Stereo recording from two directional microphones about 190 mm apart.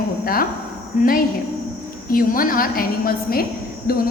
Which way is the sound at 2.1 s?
50° left (ahead or behind).